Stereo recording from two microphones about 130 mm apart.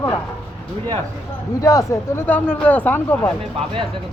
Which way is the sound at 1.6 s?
25° left (ahead or behind).